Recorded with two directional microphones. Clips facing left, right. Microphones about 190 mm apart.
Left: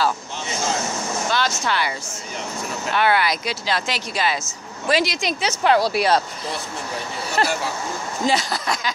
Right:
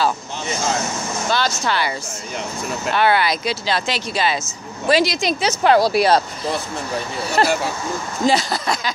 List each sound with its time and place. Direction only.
1.3 s speech: 35° right (ahead or behind)
7.4 s speech: 35° right (ahead or behind)